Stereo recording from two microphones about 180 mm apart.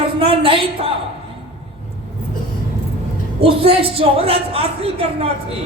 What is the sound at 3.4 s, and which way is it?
A woman's voice, 30° right (ahead or behind).